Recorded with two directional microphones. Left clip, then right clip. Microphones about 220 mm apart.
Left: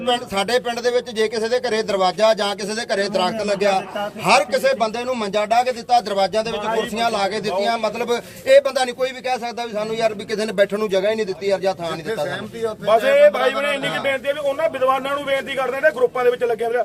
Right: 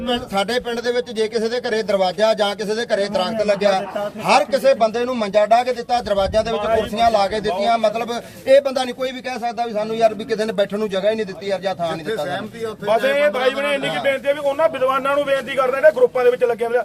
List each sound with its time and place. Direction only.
0.1 s a man's voice: 45° left (ahead or behind)
12.9 s a man's voice: 20° left (ahead or behind)